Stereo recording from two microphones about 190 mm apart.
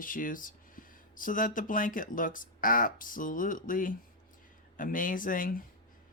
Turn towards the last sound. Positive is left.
turn(degrees=45)  # may be behind; listen again after turning